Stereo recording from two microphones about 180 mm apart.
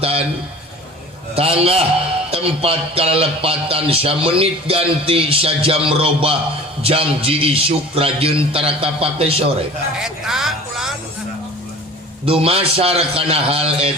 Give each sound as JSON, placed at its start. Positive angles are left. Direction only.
{"t": 0.0, "sound": "a sound", "side_deg": -30}
{"t": 1.4, "sound": "speech", "side_deg": -35}
{"t": 10.0, "sound": "speech", "side_deg": 0}
{"t": 12.2, "sound": "speech", "side_deg": -30}